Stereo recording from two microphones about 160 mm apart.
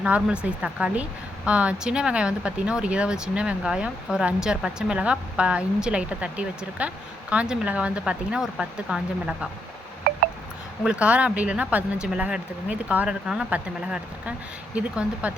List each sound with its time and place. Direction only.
0.0 s speech: 5° right (ahead or behind)
10.0 s a sound: 70° right (ahead or behind)
10.8 s speech: 5° right (ahead or behind)